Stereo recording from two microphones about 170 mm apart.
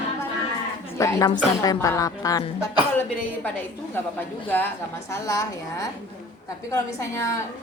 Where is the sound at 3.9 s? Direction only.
10° left (ahead or behind).